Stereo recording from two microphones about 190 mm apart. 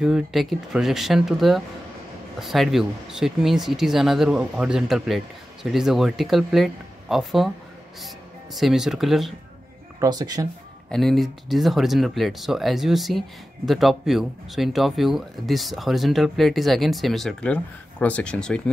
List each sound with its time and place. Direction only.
0.0 s speech: centre (ahead or behind)
8.5 s speech: centre (ahead or behind)
9.9 s speech: 20° right (ahead or behind)
10.9 s speech: centre (ahead or behind)